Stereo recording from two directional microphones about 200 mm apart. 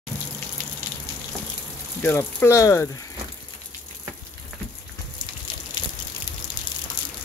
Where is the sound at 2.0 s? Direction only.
10° left (ahead or behind).